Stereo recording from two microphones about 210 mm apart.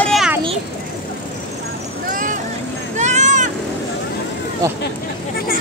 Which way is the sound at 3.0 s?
35° right (ahead or behind).